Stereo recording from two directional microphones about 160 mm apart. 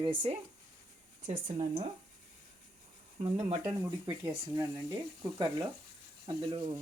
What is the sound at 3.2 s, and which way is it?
Speech, 35° right (ahead or behind).